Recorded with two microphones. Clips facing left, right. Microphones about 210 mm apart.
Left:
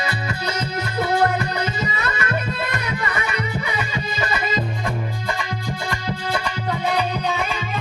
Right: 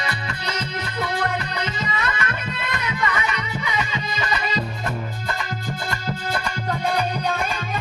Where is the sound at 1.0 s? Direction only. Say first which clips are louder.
Left 7 dB; 30° left (ahead or behind).